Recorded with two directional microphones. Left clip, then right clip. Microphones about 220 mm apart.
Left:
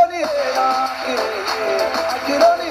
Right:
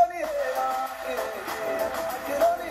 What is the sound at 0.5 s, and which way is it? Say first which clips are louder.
Music: left 10 dB; 20° left (ahead or behind).